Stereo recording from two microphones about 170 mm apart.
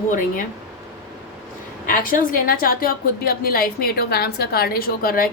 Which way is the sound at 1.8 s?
55° left (ahead or behind).